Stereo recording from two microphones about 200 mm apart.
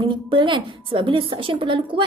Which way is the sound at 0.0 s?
25° right (ahead or behind).